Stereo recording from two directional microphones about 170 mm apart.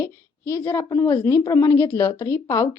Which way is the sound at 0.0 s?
15° left (ahead or behind).